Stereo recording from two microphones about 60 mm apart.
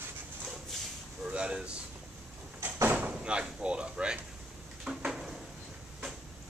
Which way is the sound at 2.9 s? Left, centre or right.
Right.